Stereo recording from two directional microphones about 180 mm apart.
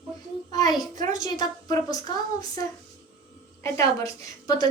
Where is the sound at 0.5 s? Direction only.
20° left (ahead or behind).